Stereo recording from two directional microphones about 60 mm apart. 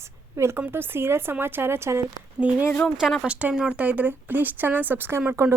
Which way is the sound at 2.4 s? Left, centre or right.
Right.